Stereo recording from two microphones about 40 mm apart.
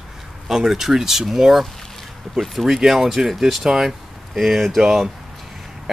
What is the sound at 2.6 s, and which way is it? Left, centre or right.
Speech, centre.